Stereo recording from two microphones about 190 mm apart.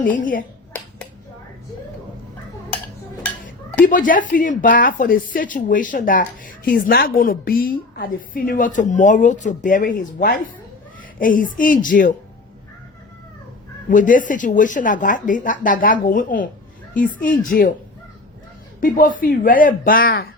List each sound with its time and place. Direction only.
3.8 s speech: 45° left (ahead or behind)
13.9 s speech: 45° left (ahead or behind)
18.8 s speech: 45° left (ahead or behind)